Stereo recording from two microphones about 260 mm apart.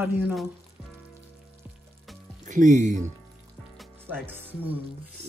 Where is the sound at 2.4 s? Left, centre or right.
Right.